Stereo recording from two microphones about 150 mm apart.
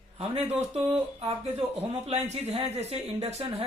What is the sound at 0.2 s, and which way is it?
Speech, 45° right (ahead or behind).